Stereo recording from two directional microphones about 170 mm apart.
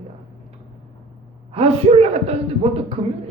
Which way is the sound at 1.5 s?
35° right (ahead or behind).